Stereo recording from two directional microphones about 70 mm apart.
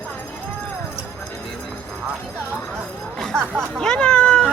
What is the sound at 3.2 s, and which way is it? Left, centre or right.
Music, centre.